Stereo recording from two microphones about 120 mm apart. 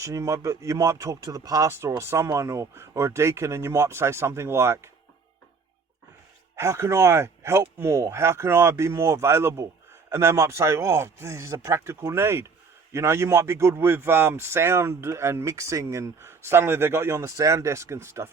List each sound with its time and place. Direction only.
0.0 s speech: 25° right (ahead or behind)
6.6 s speech: 25° right (ahead or behind)